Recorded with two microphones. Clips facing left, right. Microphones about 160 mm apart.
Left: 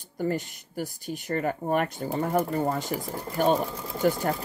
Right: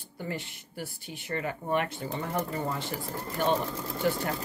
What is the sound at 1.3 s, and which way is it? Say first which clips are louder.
Speech: left 4 dB; 45° left (ahead or behind).